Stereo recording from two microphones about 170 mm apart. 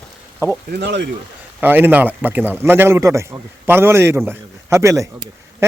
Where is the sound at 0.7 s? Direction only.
90° right.